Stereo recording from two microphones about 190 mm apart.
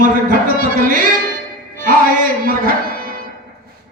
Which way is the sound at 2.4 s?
50° right (ahead or behind).